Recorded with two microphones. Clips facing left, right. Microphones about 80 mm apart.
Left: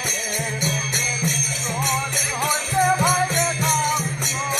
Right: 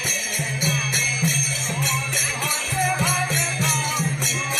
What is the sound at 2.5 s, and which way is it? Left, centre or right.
Music, left.